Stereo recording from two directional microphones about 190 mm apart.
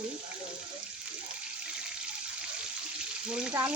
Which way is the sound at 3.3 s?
5° right (ahead or behind).